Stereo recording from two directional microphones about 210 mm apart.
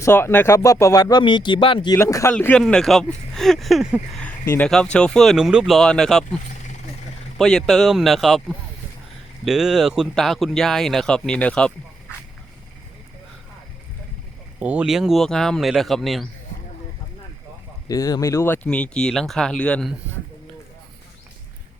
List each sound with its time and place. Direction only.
0.0 s speech: 10° left (ahead or behind)
7.3 s speech: centre (ahead or behind)
14.6 s speech: 5° right (ahead or behind)
17.8 s speech: 15° left (ahead or behind)